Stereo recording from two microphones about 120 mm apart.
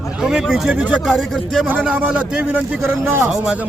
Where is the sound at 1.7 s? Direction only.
10° right (ahead or behind).